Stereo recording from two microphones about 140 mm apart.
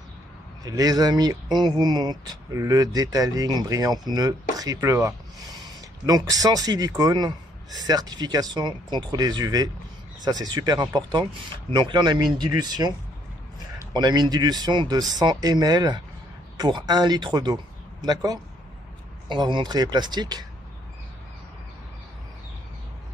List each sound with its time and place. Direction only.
0.7 s speech: 25° right (ahead or behind)
13.9 s speech: 30° right (ahead or behind)